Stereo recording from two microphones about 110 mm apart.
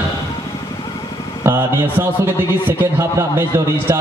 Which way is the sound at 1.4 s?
20° right (ahead or behind).